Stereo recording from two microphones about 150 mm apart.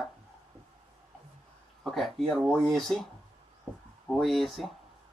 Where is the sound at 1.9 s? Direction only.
Centre (ahead or behind).